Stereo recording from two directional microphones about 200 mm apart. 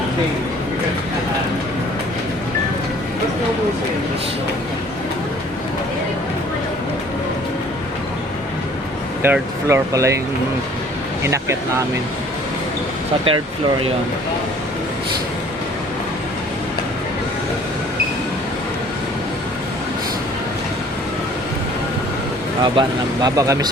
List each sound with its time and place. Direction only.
9.2 s speech: 10° right (ahead or behind)
11.2 s speech: 15° right (ahead or behind)
22.6 s speech: 20° right (ahead or behind)